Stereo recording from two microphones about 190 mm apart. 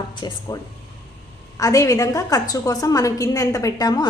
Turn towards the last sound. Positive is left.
turn(degrees=20)  # may be behind; listen again after turning